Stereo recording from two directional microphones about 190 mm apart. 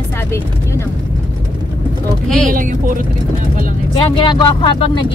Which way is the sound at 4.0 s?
25° left (ahead or behind).